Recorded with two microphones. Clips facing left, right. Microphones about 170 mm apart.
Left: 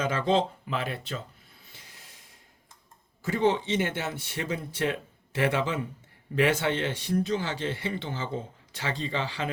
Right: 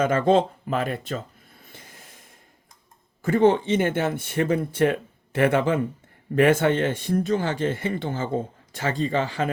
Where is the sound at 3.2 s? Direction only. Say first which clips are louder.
Right 7 dB; 50° right (ahead or behind).